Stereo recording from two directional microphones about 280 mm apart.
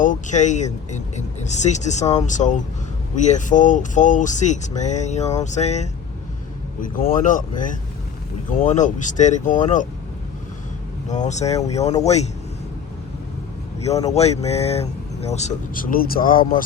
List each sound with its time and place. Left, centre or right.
0.0 s speech: left
11.1 s speech: left
14.1 s speech: left